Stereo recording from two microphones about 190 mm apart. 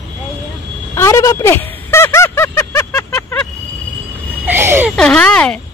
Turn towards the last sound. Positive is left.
turn(degrees=5)  # may be behind; listen again after turning